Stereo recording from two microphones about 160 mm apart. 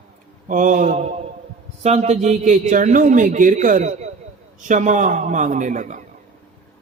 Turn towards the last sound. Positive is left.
turn(degrees=-50)  # may be behind; listen again after turning